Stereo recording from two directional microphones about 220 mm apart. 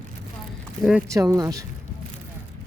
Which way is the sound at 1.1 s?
15° right (ahead or behind).